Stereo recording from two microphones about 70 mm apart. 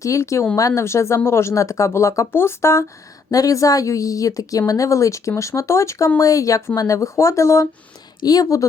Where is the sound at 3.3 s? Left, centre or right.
Left.